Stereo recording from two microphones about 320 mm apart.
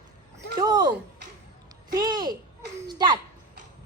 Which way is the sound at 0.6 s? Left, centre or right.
Centre.